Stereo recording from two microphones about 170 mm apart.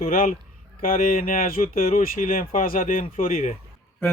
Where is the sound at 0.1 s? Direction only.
55° left (ahead or behind).